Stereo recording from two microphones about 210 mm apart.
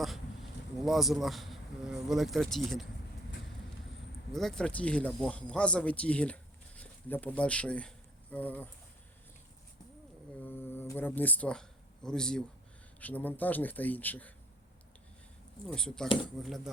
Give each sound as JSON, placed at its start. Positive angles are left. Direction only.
{"t": 0.9, "sound": "speech", "side_deg": 0}
{"t": 4.3, "sound": "speech", "side_deg": 0}
{"t": 10.4, "sound": "speech", "side_deg": 10}
{"t": 15.7, "sound": "speech", "side_deg": 5}